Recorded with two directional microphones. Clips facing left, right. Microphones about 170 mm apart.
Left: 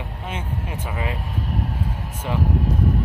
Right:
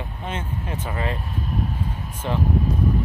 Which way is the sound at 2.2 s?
10° left (ahead or behind).